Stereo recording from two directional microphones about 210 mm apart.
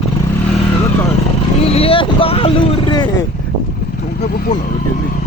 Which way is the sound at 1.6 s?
25° left (ahead or behind).